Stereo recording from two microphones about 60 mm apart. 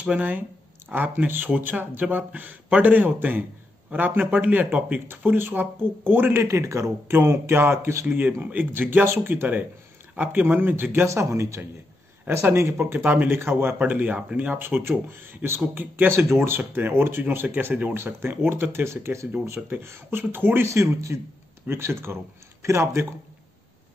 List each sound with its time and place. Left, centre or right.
0.0 s speech: right
6.4 s speech: right
8.4 s speech: right
9.0 s speech: right
9.3 s speech: right
11.1 s speech: right
13.4 s speech: right
13.7 s speech: right
16.1 s speech: right
20.6 s speech: right